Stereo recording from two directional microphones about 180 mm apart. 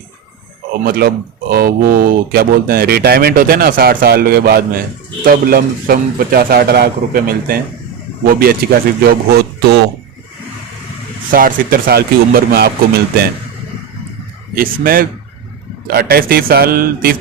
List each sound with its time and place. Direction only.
0.9 s speech: 55° right (ahead or behind)
11.3 s speech: 50° right (ahead or behind)
14.5 s speech: 55° right (ahead or behind)